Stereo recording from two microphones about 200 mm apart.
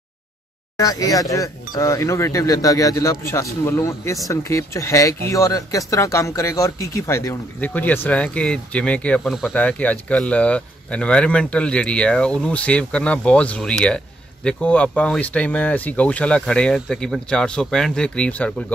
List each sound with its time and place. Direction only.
0.7 s speech: 15° left (ahead or behind)